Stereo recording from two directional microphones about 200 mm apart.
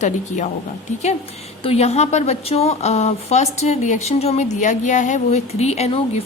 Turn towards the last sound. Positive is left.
turn(degrees=30)  # may be behind; listen again after turning